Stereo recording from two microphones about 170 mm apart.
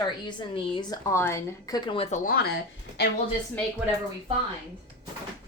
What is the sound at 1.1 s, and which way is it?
A woman's voice, 15° left (ahead or behind).